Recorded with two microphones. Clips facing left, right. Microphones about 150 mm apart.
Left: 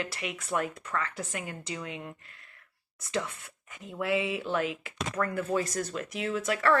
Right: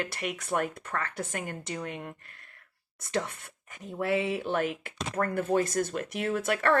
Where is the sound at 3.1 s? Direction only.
55° right (ahead or behind).